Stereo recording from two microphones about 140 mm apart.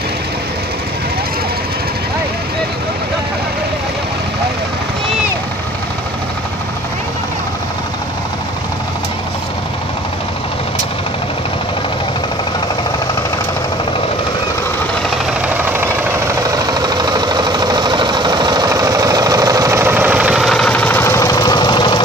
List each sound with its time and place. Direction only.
15.4 s vehicle: 15° right (ahead or behind); by 22.0 s 35° left (ahead or behind)